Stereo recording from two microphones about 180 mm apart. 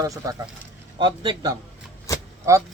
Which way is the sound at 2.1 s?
20° left (ahead or behind).